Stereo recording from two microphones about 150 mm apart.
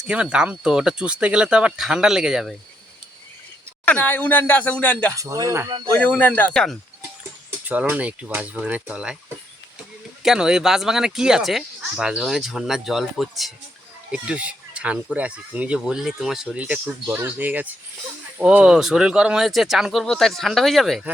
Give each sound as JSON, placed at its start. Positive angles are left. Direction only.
{"t": 0.1, "sound": "speech", "side_deg": -5}
{"t": 3.8, "sound": "speech", "side_deg": 10}
{"t": 5.1, "sound": "speech", "side_deg": -20}
{"t": 5.9, "sound": "speech", "side_deg": 10}
{"t": 7.7, "sound": "speech", "side_deg": -10}
{"t": 10.2, "sound": "speech", "side_deg": -5}